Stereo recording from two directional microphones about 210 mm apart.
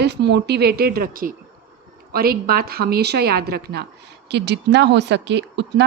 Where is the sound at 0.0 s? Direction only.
55° right (ahead or behind).